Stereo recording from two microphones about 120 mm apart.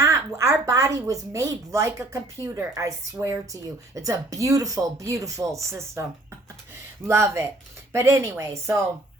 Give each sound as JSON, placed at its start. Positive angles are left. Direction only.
{"t": 0.0, "sound": "a woman's voice", "side_deg": -25}